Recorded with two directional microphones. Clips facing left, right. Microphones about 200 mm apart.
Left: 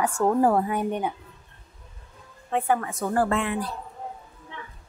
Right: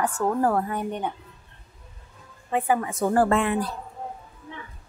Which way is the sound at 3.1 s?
35° right (ahead or behind).